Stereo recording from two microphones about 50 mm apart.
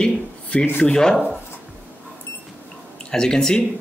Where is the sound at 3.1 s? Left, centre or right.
Centre.